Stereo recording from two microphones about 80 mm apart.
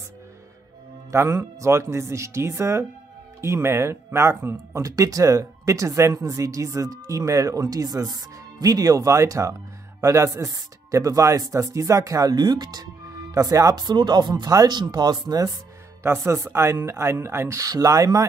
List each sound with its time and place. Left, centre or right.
1.1 s speech: right
14.3 s speech: right
16.0 s speech: right